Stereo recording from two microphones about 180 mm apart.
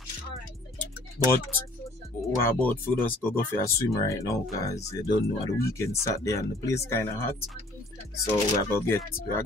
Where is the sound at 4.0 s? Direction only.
15° left (ahead or behind).